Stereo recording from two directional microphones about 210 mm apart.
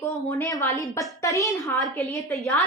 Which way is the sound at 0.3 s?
15° left (ahead or behind).